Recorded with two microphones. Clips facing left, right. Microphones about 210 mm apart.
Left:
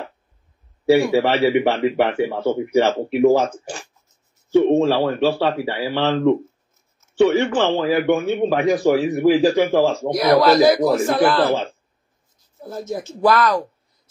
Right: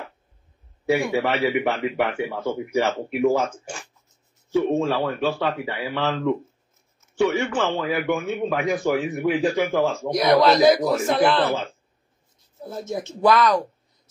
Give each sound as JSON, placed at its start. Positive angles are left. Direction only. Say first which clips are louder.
{"t": 1.1, "sound": "a man's voice", "louder": "left 5 dB", "side_deg": 30}
{"t": 10.1, "sound": "a man's voice", "louder": "left 2 dB", "side_deg": 5}
{"t": 10.9, "sound": "a man's voice", "louder": "left 3 dB", "side_deg": 30}
{"t": 12.9, "sound": "a man's voice", "louder": "left 1 dB", "side_deg": 5}